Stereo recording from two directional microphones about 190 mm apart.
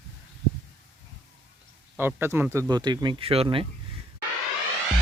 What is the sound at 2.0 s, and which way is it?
Speech, 10° right (ahead or behind).